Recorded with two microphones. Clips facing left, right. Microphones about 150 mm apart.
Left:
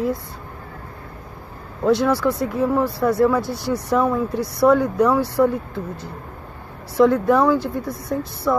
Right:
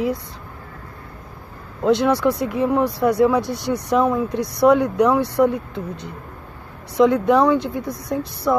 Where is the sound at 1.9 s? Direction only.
65° right (ahead or behind).